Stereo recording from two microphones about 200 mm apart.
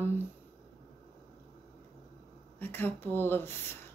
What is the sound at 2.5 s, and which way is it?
Speech, 10° left (ahead or behind).